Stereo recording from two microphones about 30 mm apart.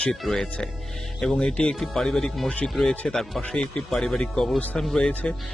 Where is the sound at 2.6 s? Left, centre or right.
Left.